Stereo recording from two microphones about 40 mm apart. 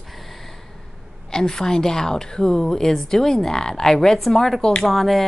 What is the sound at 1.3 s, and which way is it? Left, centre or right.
A woman's voice, centre.